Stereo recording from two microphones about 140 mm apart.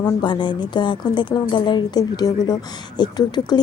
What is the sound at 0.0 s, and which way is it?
A woman's voice, 35° left (ahead or behind).